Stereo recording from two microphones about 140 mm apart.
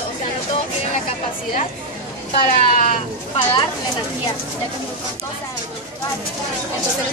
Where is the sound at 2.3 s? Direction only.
55° left (ahead or behind).